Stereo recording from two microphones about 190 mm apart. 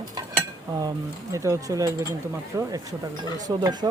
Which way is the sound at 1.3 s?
15° right (ahead or behind).